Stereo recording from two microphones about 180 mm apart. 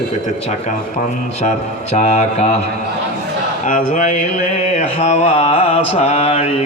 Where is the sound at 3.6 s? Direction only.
40° left (ahead or behind).